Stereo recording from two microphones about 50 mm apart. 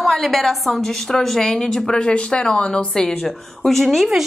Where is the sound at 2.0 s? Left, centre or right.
Centre.